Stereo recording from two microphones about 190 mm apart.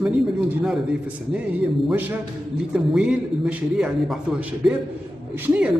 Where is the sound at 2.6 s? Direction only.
5° right (ahead or behind).